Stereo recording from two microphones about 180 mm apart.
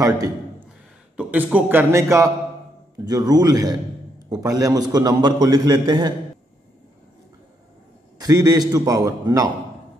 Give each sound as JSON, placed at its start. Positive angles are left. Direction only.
{"t": 1.1, "sound": "a man's voice", "side_deg": -10}
{"t": 8.2, "sound": "a man's voice", "side_deg": -20}